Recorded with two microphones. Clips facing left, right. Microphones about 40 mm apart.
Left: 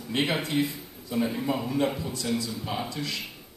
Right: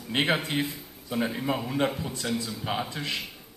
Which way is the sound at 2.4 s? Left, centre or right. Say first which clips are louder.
Right 1 dB; right.